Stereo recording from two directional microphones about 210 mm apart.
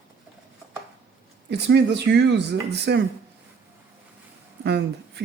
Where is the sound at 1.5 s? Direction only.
55° right (ahead or behind).